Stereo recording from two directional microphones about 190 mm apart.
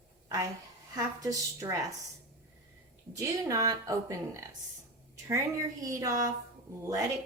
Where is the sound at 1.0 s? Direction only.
20° right (ahead or behind).